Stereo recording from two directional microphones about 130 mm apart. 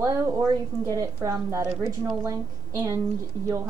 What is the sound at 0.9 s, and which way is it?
A woman's voice, 25° right (ahead or behind).